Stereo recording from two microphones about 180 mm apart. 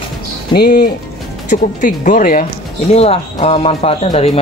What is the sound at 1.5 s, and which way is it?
Speech, 45° left (ahead or behind).